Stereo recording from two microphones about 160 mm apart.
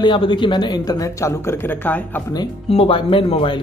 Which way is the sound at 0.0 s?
30° left (ahead or behind).